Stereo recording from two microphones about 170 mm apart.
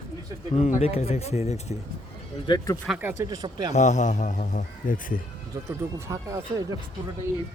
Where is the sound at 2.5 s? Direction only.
20° left (ahead or behind).